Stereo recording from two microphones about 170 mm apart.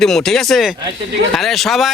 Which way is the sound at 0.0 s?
Centre (ahead or behind).